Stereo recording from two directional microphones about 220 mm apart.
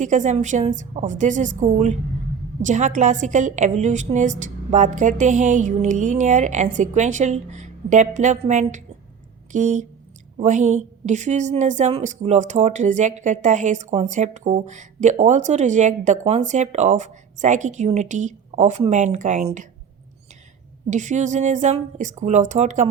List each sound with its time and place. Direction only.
0.0 s a woman's voice: 35° right (ahead or behind)
20.9 s a woman's voice: 35° right (ahead or behind)